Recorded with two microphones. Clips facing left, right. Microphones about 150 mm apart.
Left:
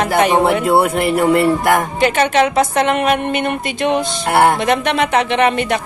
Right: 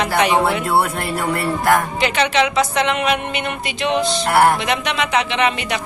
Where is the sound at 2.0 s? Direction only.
45° left (ahead or behind).